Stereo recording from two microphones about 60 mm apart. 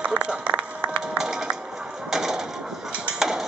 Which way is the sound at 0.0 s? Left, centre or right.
Centre.